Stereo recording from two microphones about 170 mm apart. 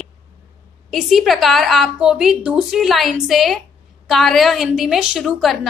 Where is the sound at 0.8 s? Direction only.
Centre (ahead or behind).